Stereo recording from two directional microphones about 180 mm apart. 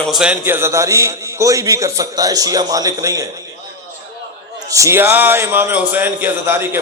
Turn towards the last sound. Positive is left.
turn(degrees=-10)  # may be behind; listen again after turning